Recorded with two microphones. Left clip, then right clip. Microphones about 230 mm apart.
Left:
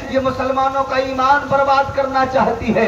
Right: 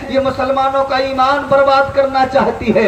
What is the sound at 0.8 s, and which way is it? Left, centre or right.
A man's voice, right.